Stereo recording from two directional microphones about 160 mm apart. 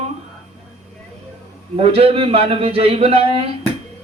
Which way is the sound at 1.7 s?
40° right (ahead or behind).